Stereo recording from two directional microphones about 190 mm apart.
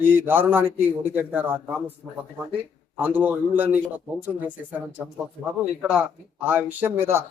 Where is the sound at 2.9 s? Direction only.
10° right (ahead or behind).